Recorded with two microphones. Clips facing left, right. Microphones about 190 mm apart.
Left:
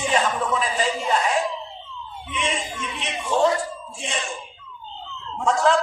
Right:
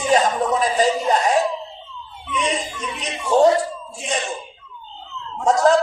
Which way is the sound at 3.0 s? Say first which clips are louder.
Right 5 dB; 40° right (ahead or behind).